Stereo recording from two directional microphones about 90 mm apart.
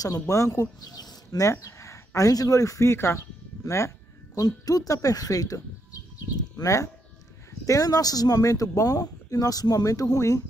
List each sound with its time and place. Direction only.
0.0 s speech: 40° left (ahead or behind)
4.4 s speech: 45° left (ahead or behind)